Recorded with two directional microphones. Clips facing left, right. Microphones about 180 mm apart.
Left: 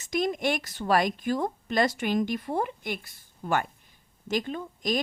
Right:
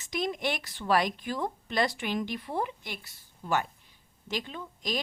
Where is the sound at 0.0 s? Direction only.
45° left (ahead or behind).